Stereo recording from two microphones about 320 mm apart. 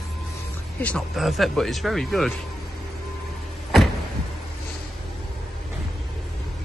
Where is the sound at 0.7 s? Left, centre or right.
Centre.